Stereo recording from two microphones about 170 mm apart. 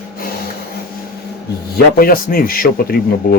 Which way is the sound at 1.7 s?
60° left (ahead or behind).